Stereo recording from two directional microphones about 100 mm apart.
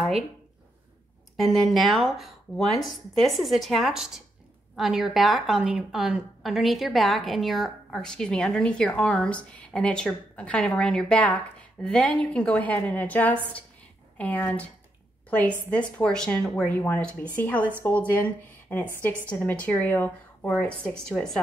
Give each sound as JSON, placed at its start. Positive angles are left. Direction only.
{"t": 1.3, "sound": "a woman's voice", "side_deg": 0}